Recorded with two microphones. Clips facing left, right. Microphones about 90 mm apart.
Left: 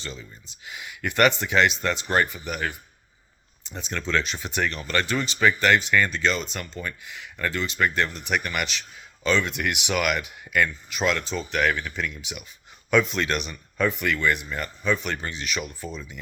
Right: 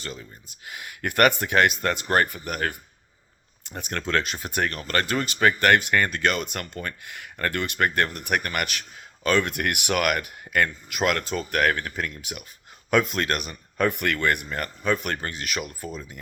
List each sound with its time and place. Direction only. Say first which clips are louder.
0.0 s speech: right 1 dB; 50° right (ahead or behind)